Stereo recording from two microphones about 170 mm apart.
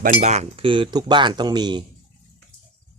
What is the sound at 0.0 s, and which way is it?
Speech, 45° right (ahead or behind).